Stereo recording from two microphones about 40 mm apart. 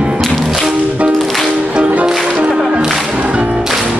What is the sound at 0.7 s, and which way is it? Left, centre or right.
Music, right.